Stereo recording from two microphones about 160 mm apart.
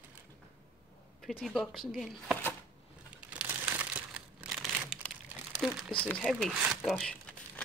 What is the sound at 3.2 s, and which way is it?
Crumpling, 10° right (ahead or behind).